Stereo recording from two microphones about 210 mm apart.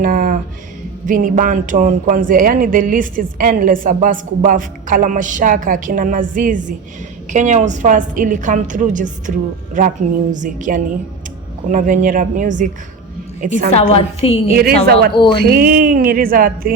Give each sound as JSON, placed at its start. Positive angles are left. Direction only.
{"t": 0.0, "sound": "a sound", "side_deg": -40}
{"t": 1.0, "sound": "speech", "side_deg": -40}
{"t": 13.7, "sound": "a woman's voice", "side_deg": 30}
{"t": 14.5, "sound": "speech", "side_deg": -45}